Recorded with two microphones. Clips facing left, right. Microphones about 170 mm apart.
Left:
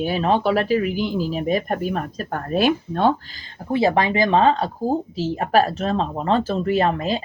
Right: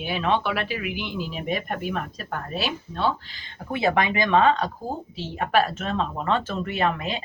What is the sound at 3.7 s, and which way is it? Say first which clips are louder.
Speech: left 4 dB; 30° left (ahead or behind).